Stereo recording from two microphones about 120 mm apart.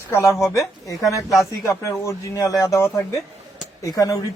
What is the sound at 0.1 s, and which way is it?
Speech, 25° left (ahead or behind).